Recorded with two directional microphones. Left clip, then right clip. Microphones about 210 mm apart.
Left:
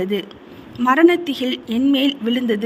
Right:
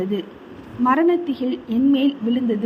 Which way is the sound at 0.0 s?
50° left (ahead or behind).